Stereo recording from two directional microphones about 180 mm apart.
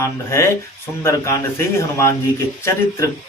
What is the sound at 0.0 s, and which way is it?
Speech, 15° left (ahead or behind).